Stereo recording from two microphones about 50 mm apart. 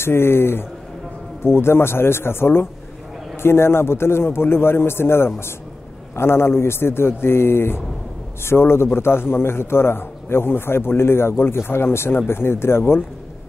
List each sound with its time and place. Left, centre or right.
0.0 s a man's voice: left